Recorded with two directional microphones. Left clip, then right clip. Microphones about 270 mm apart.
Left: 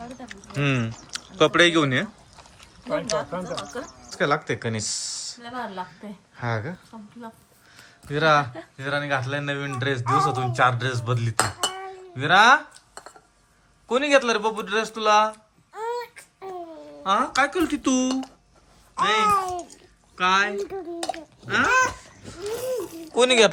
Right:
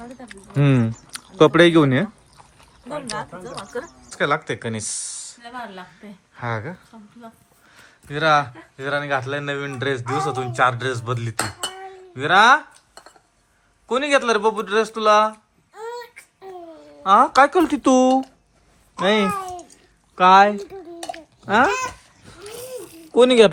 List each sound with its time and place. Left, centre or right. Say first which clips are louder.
0.5 s a sound: right 5 dB; centre
1.5 s speech: right 4 dB; centre
4.1 s speech: right 2 dB; centre
7.7 s a sound: left 1 dB; centre
8.7 s a man's voice: right 3 dB; centre
19.3 s cat: left 5 dB; centre
20.1 s speech: right 9 dB; centre
23.1 s speech: right 5 dB; right